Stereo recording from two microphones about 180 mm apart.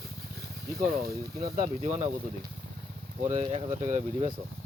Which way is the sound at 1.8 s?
40° right (ahead or behind).